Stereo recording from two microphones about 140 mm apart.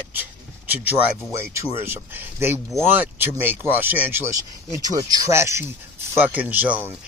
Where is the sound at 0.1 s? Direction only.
15° right (ahead or behind).